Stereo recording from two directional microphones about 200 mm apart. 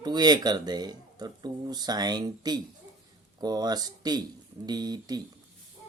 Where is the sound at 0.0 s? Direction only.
20° right (ahead or behind).